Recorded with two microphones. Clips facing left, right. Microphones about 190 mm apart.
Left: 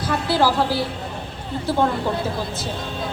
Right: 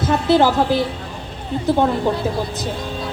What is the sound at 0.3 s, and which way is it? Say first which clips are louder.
Speech: right 4 dB; 20° right (ahead or behind).